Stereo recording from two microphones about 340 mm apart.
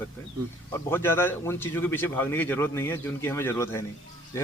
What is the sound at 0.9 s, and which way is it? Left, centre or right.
A man's voice, centre.